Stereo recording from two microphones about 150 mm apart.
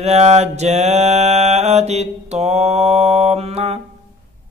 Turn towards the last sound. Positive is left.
turn(degrees=-40)  # may be behind; listen again after turning